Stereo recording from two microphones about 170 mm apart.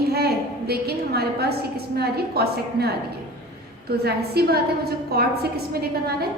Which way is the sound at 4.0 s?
70° right (ahead or behind).